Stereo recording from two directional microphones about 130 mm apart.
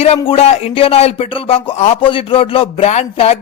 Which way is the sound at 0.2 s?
45° left (ahead or behind).